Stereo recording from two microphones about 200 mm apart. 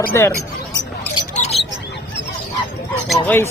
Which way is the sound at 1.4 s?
30° left (ahead or behind).